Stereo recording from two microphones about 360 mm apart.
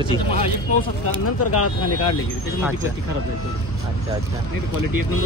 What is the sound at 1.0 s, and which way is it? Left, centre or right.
Speech, left.